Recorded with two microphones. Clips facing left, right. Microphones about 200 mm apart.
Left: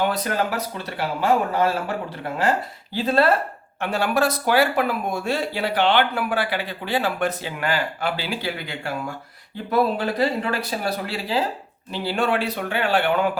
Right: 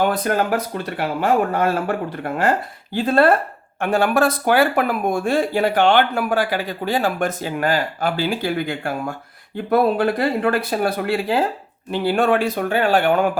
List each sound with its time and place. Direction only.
0.0 s speech: 50° right (ahead or behind)